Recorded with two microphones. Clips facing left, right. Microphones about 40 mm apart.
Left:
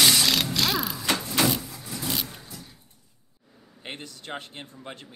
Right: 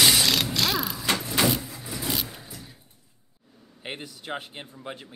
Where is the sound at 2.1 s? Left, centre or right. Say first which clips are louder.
Right 1 dB; centre.